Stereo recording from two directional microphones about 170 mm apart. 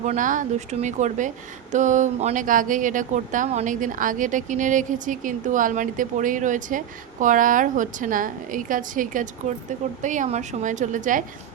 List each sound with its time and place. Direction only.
0.0 s speech: 45° right (ahead or behind)